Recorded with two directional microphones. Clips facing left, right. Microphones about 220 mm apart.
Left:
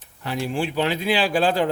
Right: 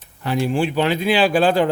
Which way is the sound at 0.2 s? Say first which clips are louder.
Right 5 dB; 60° right (ahead or behind).